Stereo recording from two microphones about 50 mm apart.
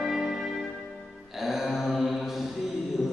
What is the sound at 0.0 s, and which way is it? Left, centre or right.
Music, centre.